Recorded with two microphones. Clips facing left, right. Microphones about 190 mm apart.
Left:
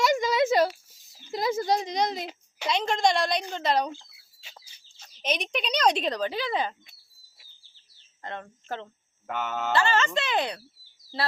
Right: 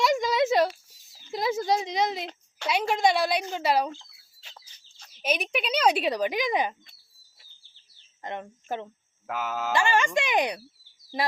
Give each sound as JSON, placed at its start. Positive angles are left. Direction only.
{"t": 0.0, "sound": "a sound", "side_deg": 0}
{"t": 2.6, "sound": "a woman's voice", "side_deg": -5}
{"t": 3.9, "sound": "chicken", "side_deg": 10}
{"t": 5.1, "sound": "speech", "side_deg": -5}
{"t": 8.2, "sound": "speech", "side_deg": -15}
{"t": 9.2, "sound": "mantra", "side_deg": 0}
{"t": 9.7, "sound": "speech", "side_deg": -15}